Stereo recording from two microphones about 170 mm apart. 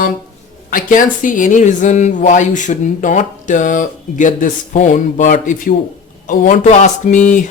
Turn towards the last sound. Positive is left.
turn(degrees=45)  # may be behind; listen again after turning